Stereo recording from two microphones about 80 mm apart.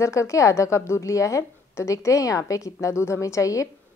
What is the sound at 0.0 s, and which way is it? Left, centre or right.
A woman's voice, left.